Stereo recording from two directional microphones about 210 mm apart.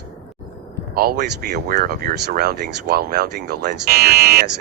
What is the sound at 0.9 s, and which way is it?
Speech, 50° right (ahead or behind).